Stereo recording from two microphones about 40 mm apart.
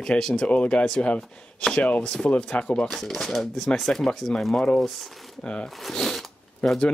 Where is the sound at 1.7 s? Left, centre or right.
Left.